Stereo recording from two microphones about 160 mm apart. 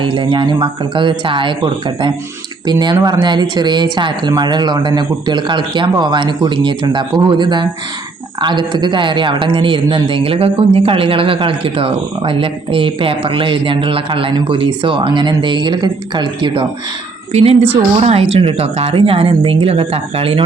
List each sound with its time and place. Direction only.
0.0 s a man's voice: 30° right (ahead or behind)